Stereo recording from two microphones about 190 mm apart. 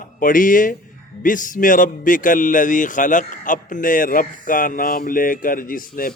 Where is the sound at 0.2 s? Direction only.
45° left (ahead or behind).